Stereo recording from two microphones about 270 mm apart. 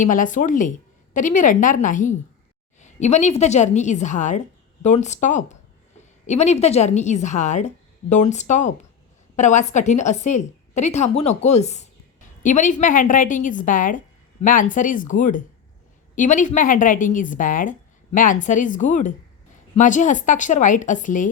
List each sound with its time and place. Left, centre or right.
0.0 s speech: left